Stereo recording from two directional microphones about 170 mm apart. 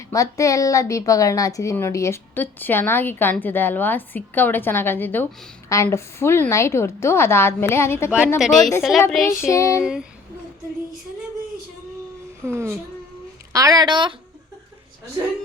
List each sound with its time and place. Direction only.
0.1 s a woman's voice: 20° left (ahead or behind)
8.4 s speech: centre (ahead or behind)
9.5 s a woman's voice: 20° left (ahead or behind)
9.8 s speech: 5° right (ahead or behind)
12.5 s speech: 15° right (ahead or behind)